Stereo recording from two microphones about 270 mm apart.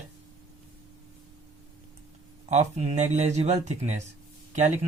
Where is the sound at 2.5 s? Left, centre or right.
Right.